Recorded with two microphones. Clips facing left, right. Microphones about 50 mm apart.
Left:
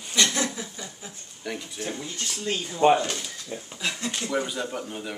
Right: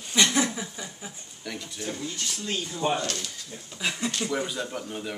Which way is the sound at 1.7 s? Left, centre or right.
Left.